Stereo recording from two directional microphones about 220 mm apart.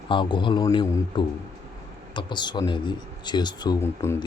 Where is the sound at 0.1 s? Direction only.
20° left (ahead or behind).